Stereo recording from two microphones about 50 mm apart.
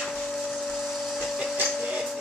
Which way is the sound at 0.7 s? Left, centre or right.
Centre.